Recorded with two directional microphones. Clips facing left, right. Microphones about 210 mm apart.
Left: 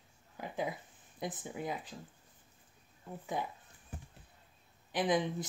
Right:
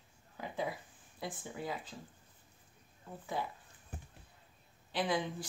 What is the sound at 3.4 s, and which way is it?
Speech, 15° left (ahead or behind).